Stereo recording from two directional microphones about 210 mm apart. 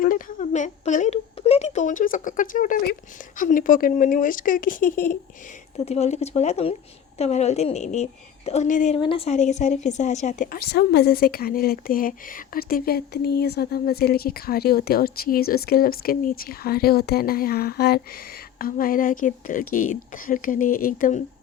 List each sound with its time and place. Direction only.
0.0 s speech: 40° left (ahead or behind)
9.0 s a woman's voice: 25° left (ahead or behind)